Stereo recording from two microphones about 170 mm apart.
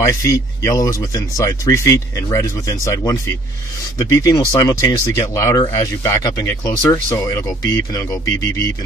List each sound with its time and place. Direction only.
0.0 s speech: 20° left (ahead or behind)